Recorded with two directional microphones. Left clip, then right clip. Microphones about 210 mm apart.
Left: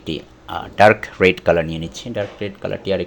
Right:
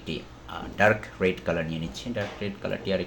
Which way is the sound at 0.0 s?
40° left (ahead or behind).